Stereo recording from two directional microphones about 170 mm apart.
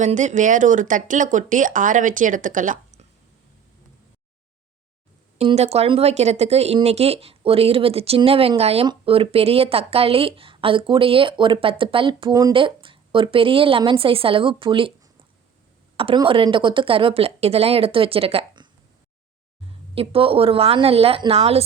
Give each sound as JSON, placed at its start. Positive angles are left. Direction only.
{"t": 0.0, "sound": "speech", "side_deg": -45}
{"t": 5.4, "sound": "speech", "side_deg": -40}
{"t": 16.0, "sound": "speech", "side_deg": -30}
{"t": 20.0, "sound": "speech", "side_deg": -35}